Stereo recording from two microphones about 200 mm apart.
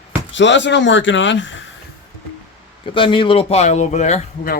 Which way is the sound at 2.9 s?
25° left (ahead or behind).